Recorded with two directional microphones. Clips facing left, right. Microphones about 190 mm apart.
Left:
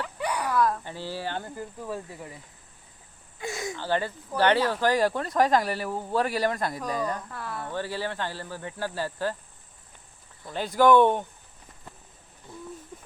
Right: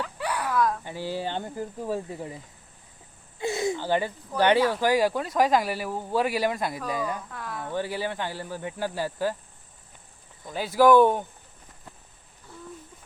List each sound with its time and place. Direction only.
0.0 s a sound: 15° left (ahead or behind)
0.5 s dog: centre (ahead or behind)
0.9 s speech: 15° right (ahead or behind)
3.3 s wheeze: 25° right (ahead or behind)
3.8 s speech: 15° right (ahead or behind); by 7.6 s centre (ahead or behind)
7.6 s speech: 15° right (ahead or behind)
10.5 s speech: 5° right (ahead or behind)
12.5 s hoot: 15° left (ahead or behind)